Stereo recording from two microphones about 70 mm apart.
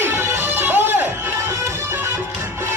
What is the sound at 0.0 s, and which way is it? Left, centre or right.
Music, right.